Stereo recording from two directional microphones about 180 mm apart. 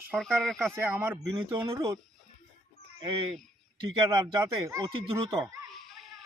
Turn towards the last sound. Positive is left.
turn(degrees=0)  # may be behind; listen again after turning